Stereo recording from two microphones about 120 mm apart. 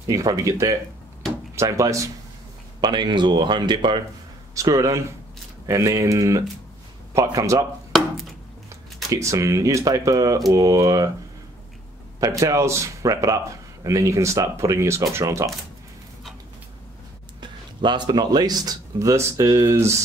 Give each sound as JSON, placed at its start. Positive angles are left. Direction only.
{"t": 0.0, "sound": "speech", "side_deg": -30}
{"t": 2.8, "sound": "speech", "side_deg": -40}
{"t": 4.6, "sound": "speech", "side_deg": -25}
{"t": 9.1, "sound": "speech", "side_deg": -25}
{"t": 12.2, "sound": "speech", "side_deg": -25}
{"t": 17.4, "sound": "speech", "side_deg": -40}